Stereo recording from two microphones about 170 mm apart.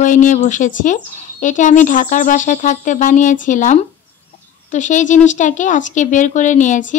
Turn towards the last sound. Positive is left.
turn(degrees=50)  # may be behind; listen again after turning